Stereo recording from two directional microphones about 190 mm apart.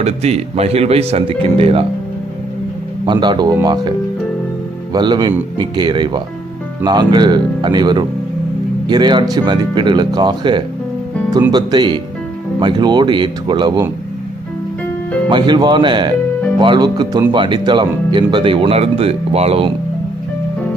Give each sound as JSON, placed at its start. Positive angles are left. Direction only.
{"t": 0.0, "sound": "speech", "side_deg": -35}
{"t": 3.1, "sound": "speech", "side_deg": -25}
{"t": 15.3, "sound": "speech", "side_deg": -25}